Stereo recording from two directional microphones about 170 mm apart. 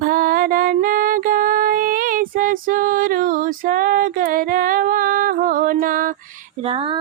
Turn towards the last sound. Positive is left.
turn(degrees=-55)  # may be behind; listen again after turning